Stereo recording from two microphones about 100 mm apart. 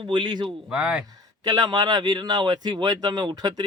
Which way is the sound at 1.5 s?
40° right (ahead or behind).